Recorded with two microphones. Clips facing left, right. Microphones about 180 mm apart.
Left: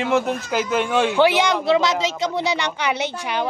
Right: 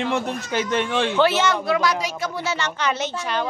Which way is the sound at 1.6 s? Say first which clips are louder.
Left 3 dB; 25° left (ahead or behind).